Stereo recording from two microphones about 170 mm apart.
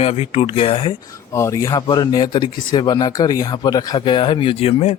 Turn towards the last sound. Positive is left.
turn(degrees=35)  # may be behind; listen again after turning